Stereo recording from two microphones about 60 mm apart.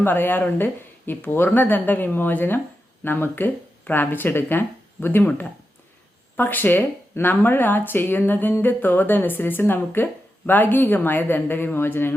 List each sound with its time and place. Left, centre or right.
0.0 s speech: left